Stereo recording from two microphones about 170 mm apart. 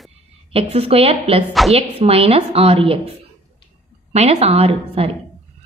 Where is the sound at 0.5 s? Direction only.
35° right (ahead or behind).